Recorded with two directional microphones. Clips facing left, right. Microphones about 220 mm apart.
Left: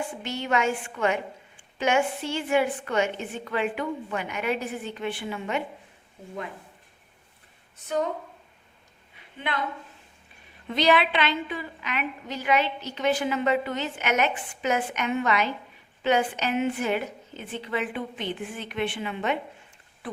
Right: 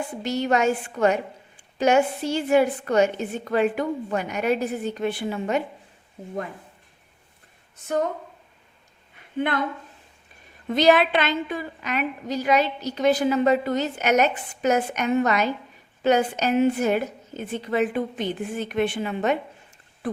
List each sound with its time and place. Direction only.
0.2 s a woman's voice: 40° right (ahead or behind)
9.1 s a sound: 50° right (ahead or behind)
10.8 s a woman's voice: 45° right (ahead or behind)